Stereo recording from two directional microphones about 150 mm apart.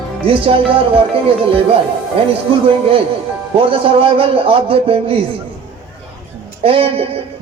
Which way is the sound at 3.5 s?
35° right (ahead or behind).